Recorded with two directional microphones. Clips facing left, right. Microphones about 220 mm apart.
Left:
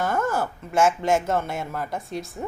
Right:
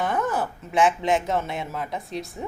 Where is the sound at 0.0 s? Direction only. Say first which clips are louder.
Left 1 dB; centre (ahead or behind).